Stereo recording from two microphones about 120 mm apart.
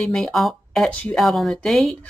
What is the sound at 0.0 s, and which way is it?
Speech, 5° left (ahead or behind).